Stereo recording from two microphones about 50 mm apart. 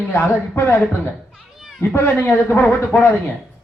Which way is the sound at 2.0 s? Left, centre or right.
Left.